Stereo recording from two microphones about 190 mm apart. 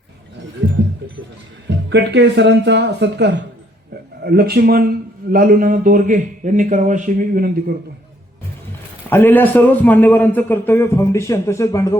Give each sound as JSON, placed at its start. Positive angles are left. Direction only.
{"t": 1.9, "sound": "speech", "side_deg": -65}
{"t": 4.2, "sound": "a man's voice", "side_deg": -55}
{"t": 9.0, "sound": "a man's voice", "side_deg": 10}